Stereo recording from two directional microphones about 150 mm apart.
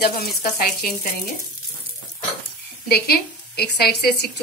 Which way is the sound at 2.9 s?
90° left.